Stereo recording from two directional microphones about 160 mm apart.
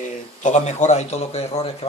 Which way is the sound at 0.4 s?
50° left (ahead or behind).